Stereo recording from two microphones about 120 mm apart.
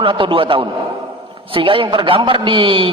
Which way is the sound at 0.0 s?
45° right (ahead or behind).